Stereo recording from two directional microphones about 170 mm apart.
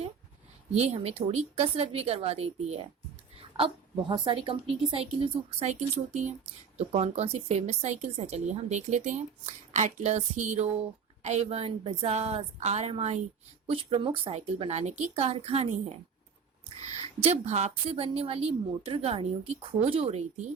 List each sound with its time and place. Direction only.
0.7 s a woman's voice: 40° right (ahead or behind)
4.1 s a woman's voice: 30° right (ahead or behind)
6.7 s a woman's voice: 40° right (ahead or behind)
17.2 s a woman's voice: 40° right (ahead or behind)